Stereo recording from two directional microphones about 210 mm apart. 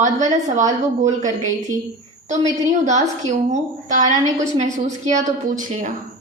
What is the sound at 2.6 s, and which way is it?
A woman's voice, 35° right (ahead or behind).